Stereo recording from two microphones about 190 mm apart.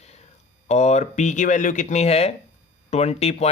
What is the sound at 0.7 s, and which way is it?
Speech, 35° left (ahead or behind).